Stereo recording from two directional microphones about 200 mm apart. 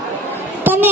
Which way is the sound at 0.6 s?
10° right (ahead or behind).